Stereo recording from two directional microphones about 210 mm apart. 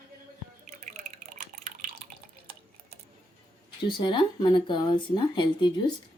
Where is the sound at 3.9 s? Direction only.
25° left (ahead or behind).